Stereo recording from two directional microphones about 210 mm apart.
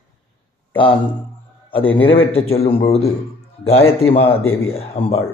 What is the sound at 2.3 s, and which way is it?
Speech, 30° left (ahead or behind).